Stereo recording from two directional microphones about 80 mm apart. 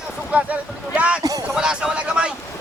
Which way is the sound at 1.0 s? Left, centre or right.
Centre.